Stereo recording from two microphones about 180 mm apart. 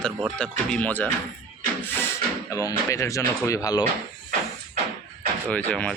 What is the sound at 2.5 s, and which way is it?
Speech, 15° left (ahead or behind).